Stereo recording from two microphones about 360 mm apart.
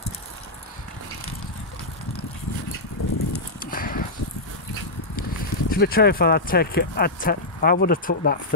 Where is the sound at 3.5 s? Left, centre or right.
Left.